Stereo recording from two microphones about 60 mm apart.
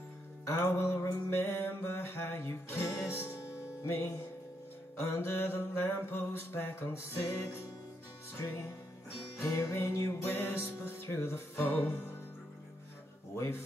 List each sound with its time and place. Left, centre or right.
0.5 s music: left
5.0 s mantra: left